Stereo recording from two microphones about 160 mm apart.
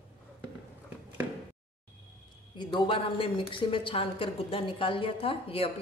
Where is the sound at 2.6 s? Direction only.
30° left (ahead or behind).